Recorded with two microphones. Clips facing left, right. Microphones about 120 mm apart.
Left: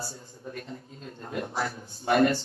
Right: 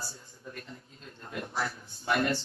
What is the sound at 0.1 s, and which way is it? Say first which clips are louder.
A man's voice: left 6 dB; 40° left (ahead or behind).